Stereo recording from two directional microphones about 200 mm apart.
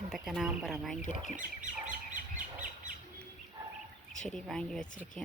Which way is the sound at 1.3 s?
40° right (ahead or behind).